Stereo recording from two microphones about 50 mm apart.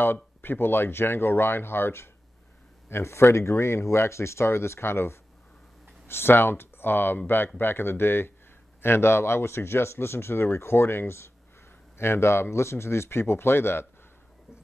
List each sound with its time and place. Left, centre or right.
0.0 s speech: left
2.9 s speech: left